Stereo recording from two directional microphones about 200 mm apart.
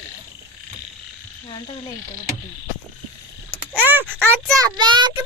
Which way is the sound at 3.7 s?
10° right (ahead or behind).